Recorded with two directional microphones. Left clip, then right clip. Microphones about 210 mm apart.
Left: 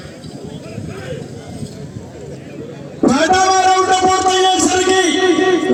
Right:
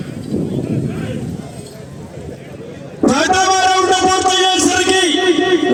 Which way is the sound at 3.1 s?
35° right (ahead or behind).